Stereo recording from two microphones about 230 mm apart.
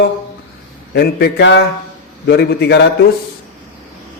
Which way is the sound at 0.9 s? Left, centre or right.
Left.